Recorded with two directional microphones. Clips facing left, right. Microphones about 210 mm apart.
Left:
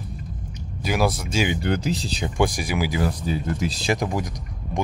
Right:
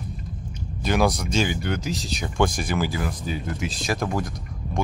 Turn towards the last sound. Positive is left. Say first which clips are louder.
# left 1 dB
turn(degrees=15)  # may be behind; listen again after turning